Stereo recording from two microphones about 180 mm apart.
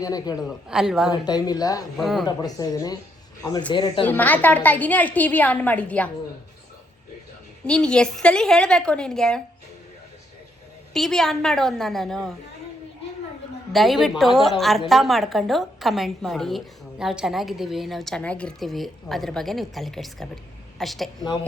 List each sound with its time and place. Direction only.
0.0 s a woman's voice: 20° left (ahead or behind)
0.3 s a woman's voice: 5° right (ahead or behind)
1.2 s a woman's voice: 20° left (ahead or behind)
2.0 s a woman's voice: centre (ahead or behind)
2.2 s a woman's voice: 20° left (ahead or behind)
4.0 s a woman's voice: 10° left (ahead or behind)
7.6 s a woman's voice: 5° left (ahead or behind)
10.9 s a woman's voice: centre (ahead or behind)
13.7 s a woman's voice: centre (ahead or behind)